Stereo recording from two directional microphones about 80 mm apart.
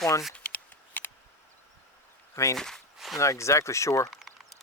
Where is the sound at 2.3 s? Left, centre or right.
Left.